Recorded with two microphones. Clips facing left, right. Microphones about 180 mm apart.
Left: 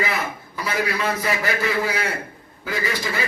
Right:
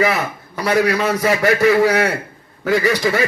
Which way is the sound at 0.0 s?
75° right (ahead or behind).